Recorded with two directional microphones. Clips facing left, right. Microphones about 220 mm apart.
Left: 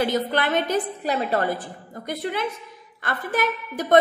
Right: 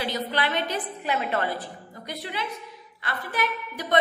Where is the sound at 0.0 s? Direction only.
50° left (ahead or behind).